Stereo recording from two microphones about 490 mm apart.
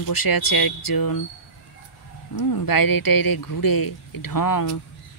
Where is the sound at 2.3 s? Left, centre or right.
Left.